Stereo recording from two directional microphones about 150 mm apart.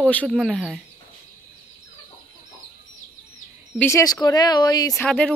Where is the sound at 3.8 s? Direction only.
20° left (ahead or behind).